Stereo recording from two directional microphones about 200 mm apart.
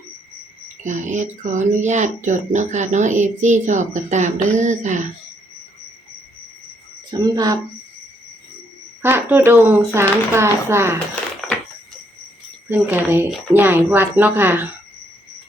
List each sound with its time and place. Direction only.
0.9 s speech: 35° right (ahead or behind)
7.1 s speech: 20° right (ahead or behind)
9.0 s speech: 10° right (ahead or behind)
11.1 s a sound: 5° left (ahead or behind)
12.6 s speech: 10° right (ahead or behind)